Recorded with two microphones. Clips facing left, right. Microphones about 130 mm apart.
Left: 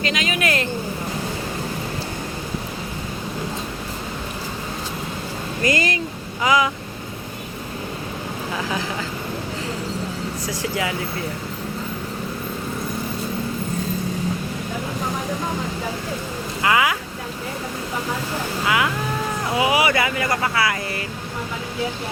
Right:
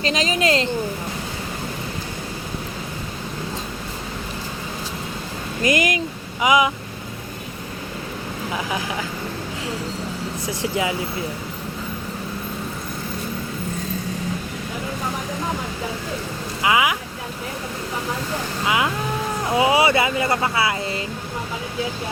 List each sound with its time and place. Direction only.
0.0 s a sound: 30° right (ahead or behind)
5.6 s speech: 15° right (ahead or behind)
10.4 s speech: 20° right (ahead or behind)
16.6 s speech: 15° right (ahead or behind)
18.6 s speech: 20° right (ahead or behind)